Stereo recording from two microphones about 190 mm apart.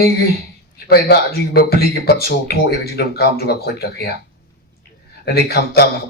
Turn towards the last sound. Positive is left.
turn(degrees=55)  # may be behind; listen again after turning